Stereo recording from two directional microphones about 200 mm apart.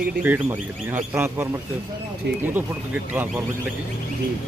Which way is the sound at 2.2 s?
60° right (ahead or behind).